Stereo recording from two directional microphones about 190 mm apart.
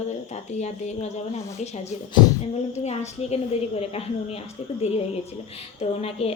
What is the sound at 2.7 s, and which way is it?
Speech, 35° left (ahead or behind).